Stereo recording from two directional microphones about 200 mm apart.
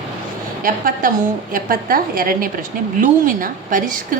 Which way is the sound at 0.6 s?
45° right (ahead or behind).